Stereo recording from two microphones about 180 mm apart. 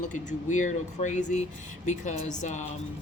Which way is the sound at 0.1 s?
45° left (ahead or behind).